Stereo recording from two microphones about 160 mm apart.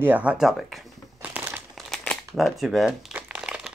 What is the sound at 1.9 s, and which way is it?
Crumpling, 5° left (ahead or behind).